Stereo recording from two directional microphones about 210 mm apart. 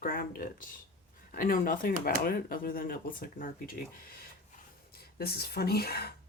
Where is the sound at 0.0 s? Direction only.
40° left (ahead or behind).